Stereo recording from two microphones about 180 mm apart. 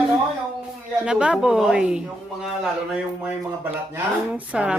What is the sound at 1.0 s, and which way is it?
Speech, 5° right (ahead or behind).